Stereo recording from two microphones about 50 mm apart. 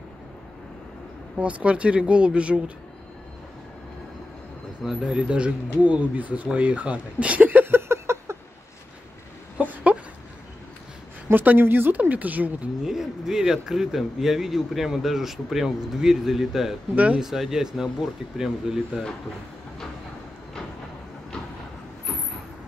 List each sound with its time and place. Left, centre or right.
1.4 s speech: right
5.0 s speech: centre; by 7.7 s right
7.7 s a sound: right
9.6 s a sound: right
11.3 s speech: right
12.8 s speech: centre
16.9 s speech: right
17.2 s speech: centre